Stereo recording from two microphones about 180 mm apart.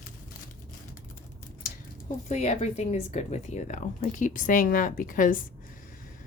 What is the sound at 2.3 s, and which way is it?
Speech, 40° left (ahead or behind).